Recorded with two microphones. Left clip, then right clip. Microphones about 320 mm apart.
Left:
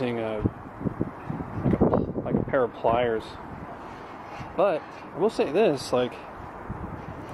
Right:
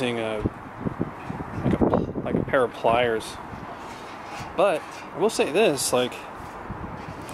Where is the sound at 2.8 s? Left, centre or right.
Left.